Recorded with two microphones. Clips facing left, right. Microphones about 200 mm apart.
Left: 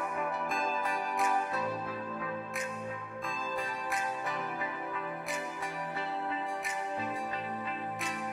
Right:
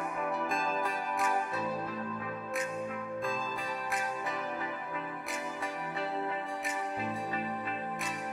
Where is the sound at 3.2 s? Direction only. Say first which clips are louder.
Right 1 dB; centre (ahead or behind).